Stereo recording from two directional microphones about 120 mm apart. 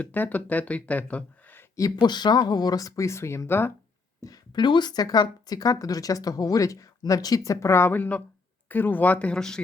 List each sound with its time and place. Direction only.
0.0 s speech: 15° left (ahead or behind)
1.7 s speech: 30° left (ahead or behind)
4.2 s speech: 35° left (ahead or behind); by 9.6 s 5° left (ahead or behind)